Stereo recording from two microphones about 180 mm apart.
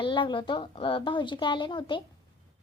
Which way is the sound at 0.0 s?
25° left (ahead or behind).